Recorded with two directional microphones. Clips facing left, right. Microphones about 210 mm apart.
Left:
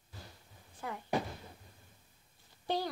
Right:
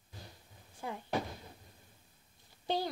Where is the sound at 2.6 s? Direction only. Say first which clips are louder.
Even; 10° right (ahead or behind).